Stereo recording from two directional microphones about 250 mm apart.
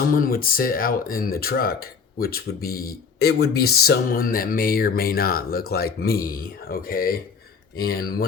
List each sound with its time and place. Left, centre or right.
0.1 s speech: left